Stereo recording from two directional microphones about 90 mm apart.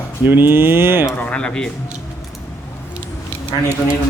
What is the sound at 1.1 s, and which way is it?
Speech, 15° left (ahead or behind).